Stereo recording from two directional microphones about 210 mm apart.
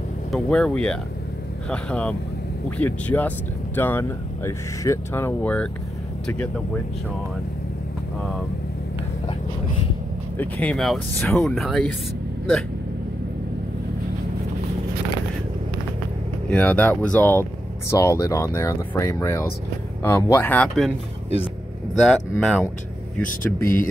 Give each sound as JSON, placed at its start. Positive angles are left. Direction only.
{"t": 0.3, "sound": "speech", "side_deg": 5}
{"t": 10.3, "sound": "speech", "side_deg": 5}
{"t": 16.4, "sound": "speech", "side_deg": 5}
{"t": 22.0, "sound": "speech", "side_deg": 5}
{"t": 23.2, "sound": "speech", "side_deg": 40}